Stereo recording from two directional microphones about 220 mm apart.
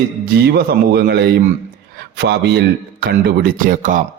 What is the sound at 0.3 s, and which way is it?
A man's voice, 45° right (ahead or behind).